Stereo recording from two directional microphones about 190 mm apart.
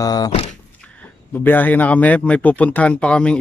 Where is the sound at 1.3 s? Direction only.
10° left (ahead or behind).